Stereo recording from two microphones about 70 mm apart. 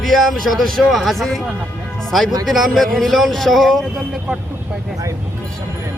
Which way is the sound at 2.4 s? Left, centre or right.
Centre.